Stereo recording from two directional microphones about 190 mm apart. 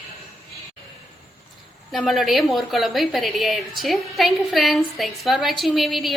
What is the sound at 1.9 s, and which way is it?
A woman's voice, centre (ahead or behind).